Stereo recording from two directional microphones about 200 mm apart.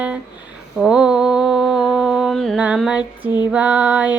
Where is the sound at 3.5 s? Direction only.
5° right (ahead or behind).